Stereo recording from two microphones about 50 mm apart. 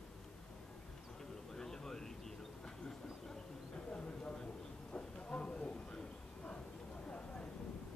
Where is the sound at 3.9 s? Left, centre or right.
Left.